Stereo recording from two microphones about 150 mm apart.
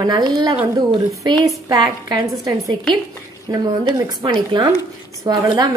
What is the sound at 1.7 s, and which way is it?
Speech, 25° right (ahead or behind).